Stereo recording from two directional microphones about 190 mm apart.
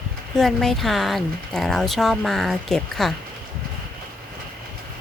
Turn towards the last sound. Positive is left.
turn(degrees=0)  # may be behind; listen again after turning